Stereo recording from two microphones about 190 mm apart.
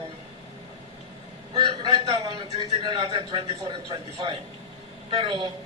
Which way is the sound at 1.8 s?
30° right (ahead or behind).